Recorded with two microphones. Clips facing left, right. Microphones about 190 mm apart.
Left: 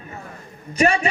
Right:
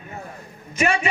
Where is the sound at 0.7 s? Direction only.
40° left (ahead or behind).